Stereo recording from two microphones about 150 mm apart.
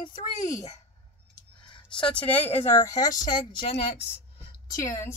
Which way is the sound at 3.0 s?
25° left (ahead or behind).